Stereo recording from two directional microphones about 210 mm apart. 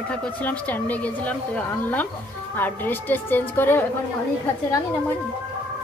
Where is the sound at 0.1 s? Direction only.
5° left (ahead or behind).